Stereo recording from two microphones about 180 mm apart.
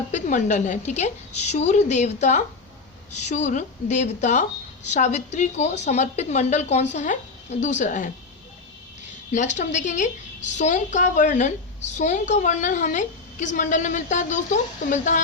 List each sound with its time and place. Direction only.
0.1 s speech: 40° left (ahead or behind)
9.3 s a woman's voice: 40° left (ahead or behind)